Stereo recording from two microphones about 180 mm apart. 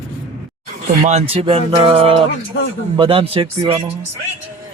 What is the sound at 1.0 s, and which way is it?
Speech, 35° right (ahead or behind).